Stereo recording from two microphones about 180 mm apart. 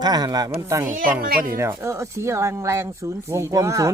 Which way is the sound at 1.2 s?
55° right (ahead or behind).